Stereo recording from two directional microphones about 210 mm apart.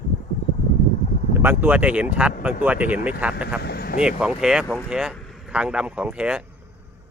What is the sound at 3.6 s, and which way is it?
Speech, 50° left (ahead or behind).